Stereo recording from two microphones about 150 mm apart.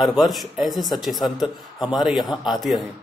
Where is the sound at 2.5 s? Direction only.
Centre (ahead or behind).